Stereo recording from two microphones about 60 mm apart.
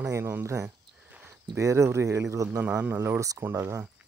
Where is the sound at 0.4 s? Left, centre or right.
Right.